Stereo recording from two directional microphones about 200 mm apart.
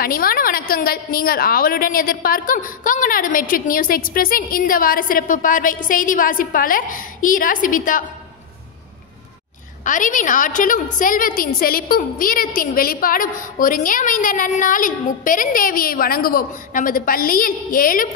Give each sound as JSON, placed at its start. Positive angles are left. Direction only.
{"t": 0.0, "sound": "a woman's voice", "side_deg": 45}
{"t": 9.8, "sound": "a woman's voice", "side_deg": 40}